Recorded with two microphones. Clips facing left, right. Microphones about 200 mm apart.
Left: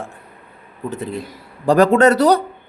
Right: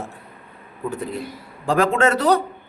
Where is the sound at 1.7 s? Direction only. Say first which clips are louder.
Left 6 dB; 40° left (ahead or behind).